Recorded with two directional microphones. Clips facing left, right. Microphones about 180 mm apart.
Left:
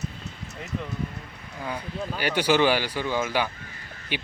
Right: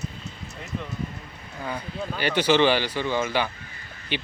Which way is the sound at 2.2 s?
10° left (ahead or behind).